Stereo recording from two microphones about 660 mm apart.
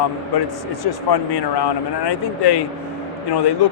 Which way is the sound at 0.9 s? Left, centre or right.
Left.